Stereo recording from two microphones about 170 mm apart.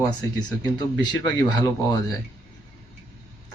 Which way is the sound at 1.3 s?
20° left (ahead or behind).